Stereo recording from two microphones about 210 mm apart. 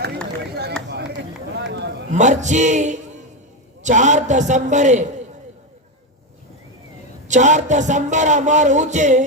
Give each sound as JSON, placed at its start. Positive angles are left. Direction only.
{"t": 0.9, "sound": "a sound", "side_deg": -55}
{"t": 2.1, "sound": "speech", "side_deg": -35}
{"t": 7.3, "sound": "speech", "side_deg": -35}